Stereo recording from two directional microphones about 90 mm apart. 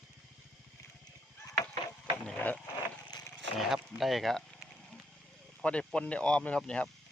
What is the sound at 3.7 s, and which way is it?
Speech, centre (ahead or behind).